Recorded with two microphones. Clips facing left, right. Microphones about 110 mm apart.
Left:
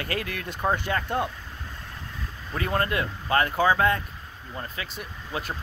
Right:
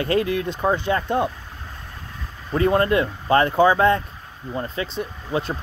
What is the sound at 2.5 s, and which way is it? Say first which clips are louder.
Speech: right 8 dB; 25° right (ahead or behind).